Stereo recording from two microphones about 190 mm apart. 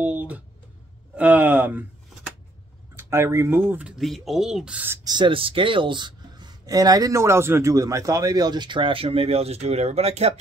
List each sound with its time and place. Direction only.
0.0 s a sound: 5° right (ahead or behind)
3.0 s speech: 15° right (ahead or behind)
5.1 s speech: 25° right (ahead or behind)